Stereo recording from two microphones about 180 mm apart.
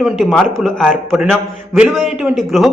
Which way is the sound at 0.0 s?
Centre (ahead or behind).